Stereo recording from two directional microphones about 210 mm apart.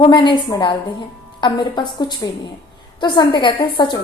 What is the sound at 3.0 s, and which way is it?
Speech, 20° left (ahead or behind).